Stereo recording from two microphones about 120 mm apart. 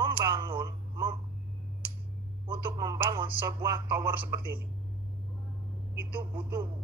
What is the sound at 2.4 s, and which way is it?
A man's voice, 45° right (ahead or behind).